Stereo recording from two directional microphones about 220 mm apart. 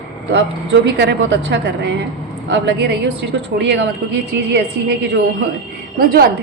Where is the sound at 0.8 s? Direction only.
50° right (ahead or behind).